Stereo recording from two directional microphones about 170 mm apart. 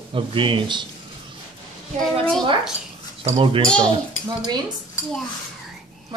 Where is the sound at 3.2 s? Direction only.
30° right (ahead or behind).